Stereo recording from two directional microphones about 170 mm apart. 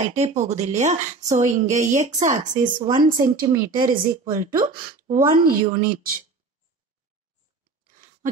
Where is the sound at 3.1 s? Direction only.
55° right (ahead or behind).